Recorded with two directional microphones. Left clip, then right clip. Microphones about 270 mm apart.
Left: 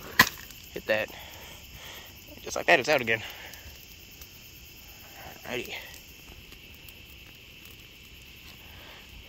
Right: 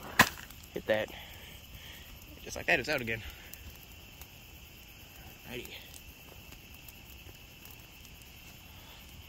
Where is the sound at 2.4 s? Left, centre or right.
Centre.